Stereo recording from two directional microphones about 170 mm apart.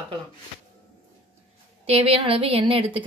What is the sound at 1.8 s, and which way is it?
A woman's voice, 35° right (ahead or behind).